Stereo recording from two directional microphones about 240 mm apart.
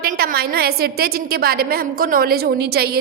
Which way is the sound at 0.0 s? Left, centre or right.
Right.